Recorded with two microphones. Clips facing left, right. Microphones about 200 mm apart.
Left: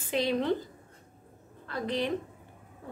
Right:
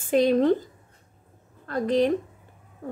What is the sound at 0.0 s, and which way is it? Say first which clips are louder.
Speech: right 9 dB; 50° right (ahead or behind).